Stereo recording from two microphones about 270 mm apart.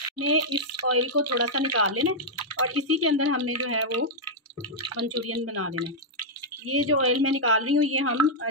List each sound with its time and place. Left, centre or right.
0.2 s speech: right